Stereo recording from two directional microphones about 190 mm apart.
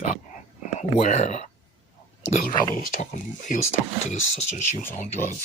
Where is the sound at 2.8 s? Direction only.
45° left (ahead or behind).